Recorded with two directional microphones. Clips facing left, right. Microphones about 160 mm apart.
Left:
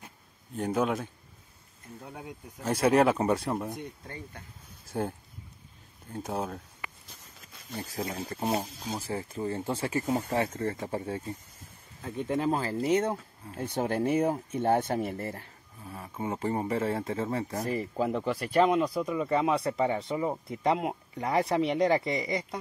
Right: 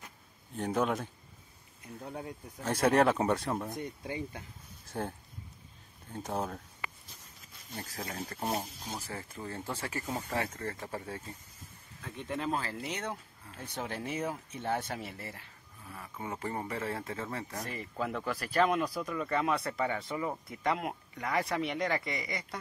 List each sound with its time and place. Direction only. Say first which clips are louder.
0.6 s speech: left 3 dB; centre (ahead or behind)
2.1 s speech: right 1 dB; 5° left (ahead or behind)
4.9 s speech: left 5 dB; 10° left (ahead or behind)
6.1 s speech: left 2 dB; centre (ahead or behind)
7.9 s speech: left 6 dB; 25° left (ahead or behind)
12.0 s speech: left 7 dB; 35° left (ahead or behind)
15.8 s speech: left 6 dB; 30° left (ahead or behind)
17.6 s speech: left 7 dB; 35° left (ahead or behind)